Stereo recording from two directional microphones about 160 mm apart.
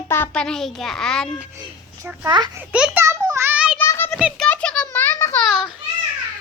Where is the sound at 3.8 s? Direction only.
15° left (ahead or behind).